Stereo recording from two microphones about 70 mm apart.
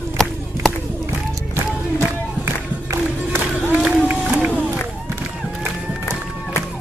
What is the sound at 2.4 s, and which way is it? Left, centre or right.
Music, right.